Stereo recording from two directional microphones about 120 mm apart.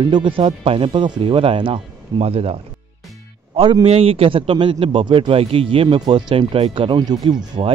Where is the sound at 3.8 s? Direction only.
55° right (ahead or behind); by 7.6 s 35° right (ahead or behind).